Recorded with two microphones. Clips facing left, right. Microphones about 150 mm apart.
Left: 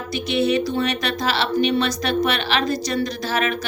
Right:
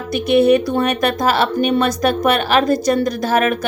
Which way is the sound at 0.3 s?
55° right (ahead or behind).